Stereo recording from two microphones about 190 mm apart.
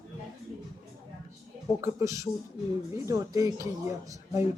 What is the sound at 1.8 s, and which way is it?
Speech, 15° right (ahead or behind).